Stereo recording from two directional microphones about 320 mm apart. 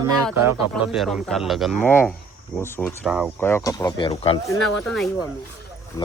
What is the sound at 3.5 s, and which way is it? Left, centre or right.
Speech, centre.